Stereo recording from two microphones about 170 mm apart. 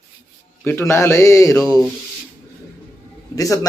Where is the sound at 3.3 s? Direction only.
20° left (ahead or behind).